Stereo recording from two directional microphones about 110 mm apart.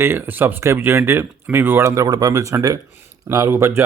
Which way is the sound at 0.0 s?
20° right (ahead or behind).